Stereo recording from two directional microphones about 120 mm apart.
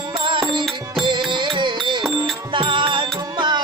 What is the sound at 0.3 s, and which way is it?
Music, 45° right (ahead or behind).